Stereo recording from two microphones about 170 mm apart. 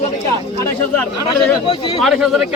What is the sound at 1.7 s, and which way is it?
Speech, 30° left (ahead or behind).